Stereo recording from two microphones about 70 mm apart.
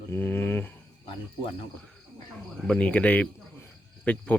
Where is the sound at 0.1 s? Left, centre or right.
Left.